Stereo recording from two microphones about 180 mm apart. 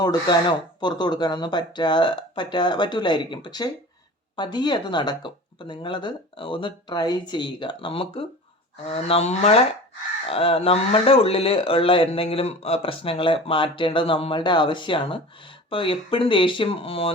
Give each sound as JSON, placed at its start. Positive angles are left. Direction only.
{"t": 0.0, "sound": "speech", "side_deg": 25}